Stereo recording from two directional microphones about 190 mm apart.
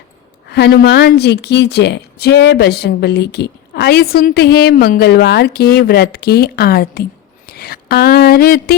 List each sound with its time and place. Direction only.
0.5 s a woman's voice: 60° left (ahead or behind)